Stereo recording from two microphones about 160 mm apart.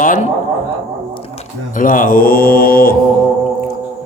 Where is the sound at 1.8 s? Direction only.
60° left (ahead or behind).